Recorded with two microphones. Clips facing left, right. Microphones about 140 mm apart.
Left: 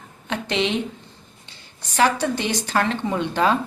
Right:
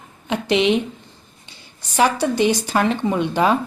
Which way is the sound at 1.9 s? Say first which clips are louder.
Right 3 dB; 15° right (ahead or behind).